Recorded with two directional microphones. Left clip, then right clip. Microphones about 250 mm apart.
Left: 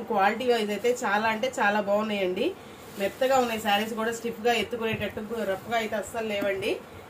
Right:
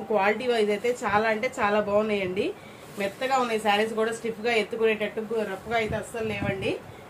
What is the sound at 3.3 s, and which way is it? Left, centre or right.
A woman's voice, centre.